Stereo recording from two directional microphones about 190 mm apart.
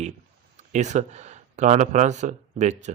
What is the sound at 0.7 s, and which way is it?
Speech, 40° right (ahead or behind).